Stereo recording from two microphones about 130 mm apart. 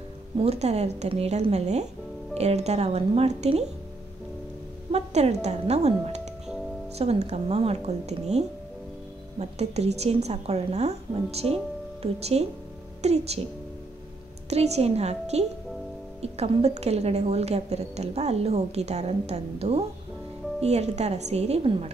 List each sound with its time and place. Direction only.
0.4 s a woman's voice: 55° right (ahead or behind)
4.9 s a woman's voice: 55° right (ahead or behind)
14.5 s a woman's voice: 55° right (ahead or behind)